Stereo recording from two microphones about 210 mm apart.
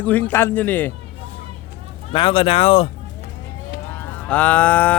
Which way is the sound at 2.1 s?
25° left (ahead or behind).